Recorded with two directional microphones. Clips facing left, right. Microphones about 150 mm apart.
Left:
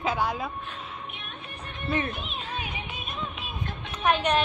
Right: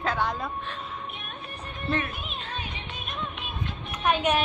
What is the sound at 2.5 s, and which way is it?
Music, 10° left (ahead or behind).